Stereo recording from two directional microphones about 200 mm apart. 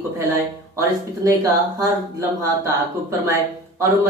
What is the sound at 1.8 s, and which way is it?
Speech, 15° right (ahead or behind).